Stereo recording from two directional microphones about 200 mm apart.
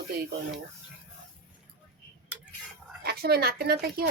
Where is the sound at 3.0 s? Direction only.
50° right (ahead or behind).